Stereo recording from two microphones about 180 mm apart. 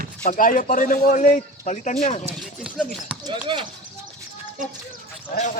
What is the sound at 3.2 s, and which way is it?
Speech, 25° right (ahead or behind).